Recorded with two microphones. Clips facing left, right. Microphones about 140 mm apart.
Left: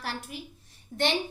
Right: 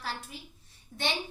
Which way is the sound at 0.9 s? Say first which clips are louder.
Left 8 dB; 40° left (ahead or behind).